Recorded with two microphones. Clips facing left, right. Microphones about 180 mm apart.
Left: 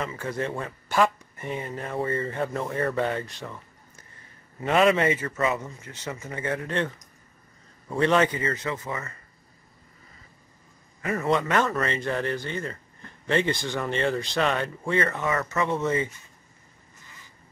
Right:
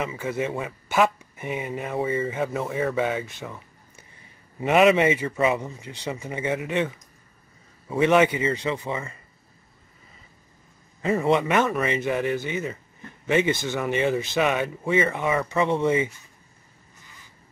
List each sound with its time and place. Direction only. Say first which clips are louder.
0.0 s speech: right 3 dB; 10° right (ahead or behind)
4.7 s a man's voice: right 3 dB; 20° right (ahead or behind)
11.0 s speech: right 4 dB; 25° right (ahead or behind)